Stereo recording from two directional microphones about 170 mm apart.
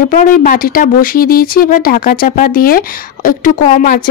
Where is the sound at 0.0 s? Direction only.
55° left (ahead or behind).